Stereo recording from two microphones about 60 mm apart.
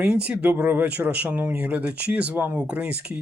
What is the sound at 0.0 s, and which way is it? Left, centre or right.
Speech, right.